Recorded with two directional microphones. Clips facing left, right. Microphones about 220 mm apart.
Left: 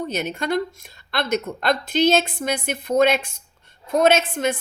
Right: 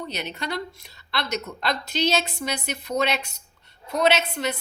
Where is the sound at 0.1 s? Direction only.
50° left (ahead or behind).